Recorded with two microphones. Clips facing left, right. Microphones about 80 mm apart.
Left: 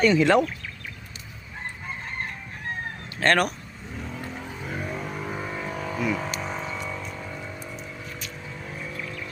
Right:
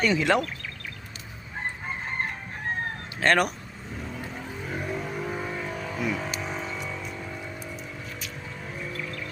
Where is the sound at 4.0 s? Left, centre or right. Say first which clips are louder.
Left 1 dB; centre.